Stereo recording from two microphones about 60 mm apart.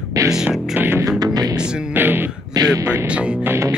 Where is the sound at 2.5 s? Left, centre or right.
Right.